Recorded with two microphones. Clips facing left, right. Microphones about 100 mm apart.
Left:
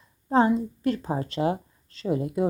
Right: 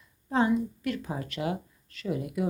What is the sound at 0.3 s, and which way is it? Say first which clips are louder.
A woman's voice: left 4 dB; 35° left (ahead or behind).